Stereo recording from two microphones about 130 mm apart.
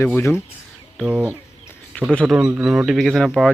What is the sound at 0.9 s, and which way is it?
Speech, 10° right (ahead or behind).